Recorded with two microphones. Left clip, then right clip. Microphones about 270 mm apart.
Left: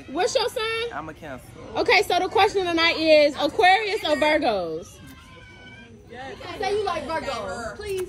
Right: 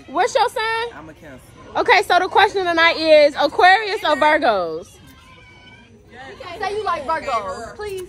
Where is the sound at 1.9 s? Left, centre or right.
Centre.